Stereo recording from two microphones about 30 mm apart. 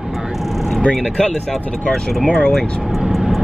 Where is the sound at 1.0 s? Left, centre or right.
Left.